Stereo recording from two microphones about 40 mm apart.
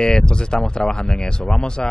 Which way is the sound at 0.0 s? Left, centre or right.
Left.